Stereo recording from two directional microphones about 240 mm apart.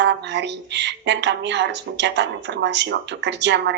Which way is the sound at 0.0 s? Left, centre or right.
Right.